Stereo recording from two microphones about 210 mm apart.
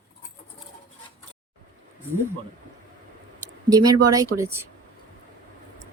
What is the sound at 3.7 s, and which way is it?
Speech, 20° right (ahead or behind).